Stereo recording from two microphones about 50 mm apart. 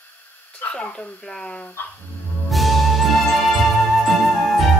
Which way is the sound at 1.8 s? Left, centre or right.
Left.